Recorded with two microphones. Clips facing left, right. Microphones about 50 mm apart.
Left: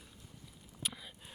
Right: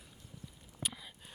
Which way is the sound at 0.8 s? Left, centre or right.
Centre.